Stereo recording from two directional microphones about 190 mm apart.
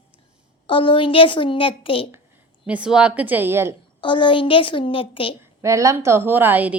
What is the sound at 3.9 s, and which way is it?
A woman's voice, 25° left (ahead or behind).